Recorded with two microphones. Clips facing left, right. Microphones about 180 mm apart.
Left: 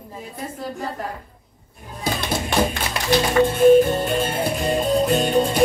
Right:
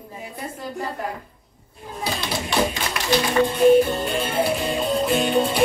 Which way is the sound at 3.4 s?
45° left (ahead or behind).